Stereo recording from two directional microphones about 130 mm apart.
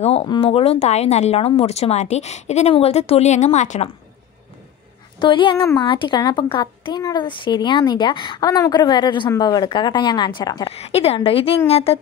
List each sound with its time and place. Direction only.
0.0 s a woman's voice: 50° left (ahead or behind)
5.2 s a woman's voice: 40° left (ahead or behind)
10.7 s a woman's voice: 50° left (ahead or behind)